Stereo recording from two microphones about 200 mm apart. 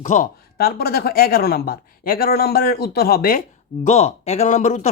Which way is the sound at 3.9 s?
30° left (ahead or behind).